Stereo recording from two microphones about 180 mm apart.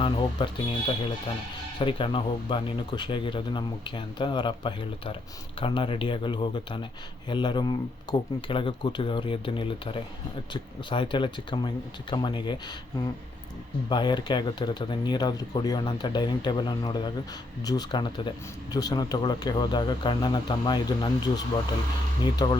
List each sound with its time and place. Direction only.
0.0 s speech: 25° left (ahead or behind)
1.8 s speech: 30° left (ahead or behind)
13.9 s speech: 25° left (ahead or behind)